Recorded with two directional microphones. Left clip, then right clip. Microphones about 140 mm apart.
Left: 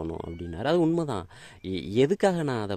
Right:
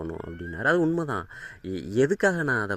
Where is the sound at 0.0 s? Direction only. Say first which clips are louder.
Even; centre (ahead or behind).